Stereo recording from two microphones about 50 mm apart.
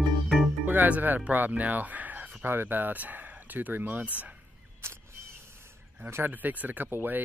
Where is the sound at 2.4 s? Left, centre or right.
Right.